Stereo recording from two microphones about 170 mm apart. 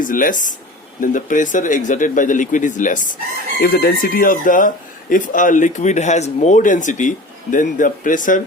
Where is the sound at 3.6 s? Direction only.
65° left (ahead or behind).